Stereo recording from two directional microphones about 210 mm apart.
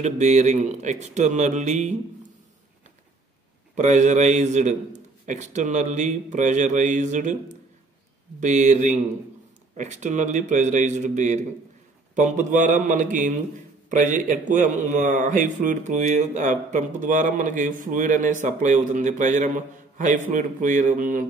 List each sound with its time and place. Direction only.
0.0 s speech: 35° right (ahead or behind)
3.7 s speech: 35° right (ahead or behind)
8.4 s speech: 35° right (ahead or behind)